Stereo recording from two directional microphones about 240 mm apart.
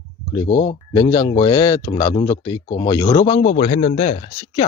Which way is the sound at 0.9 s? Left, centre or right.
Centre.